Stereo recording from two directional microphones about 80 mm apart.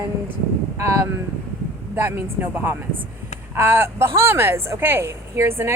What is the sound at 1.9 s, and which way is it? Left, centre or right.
Speech, right.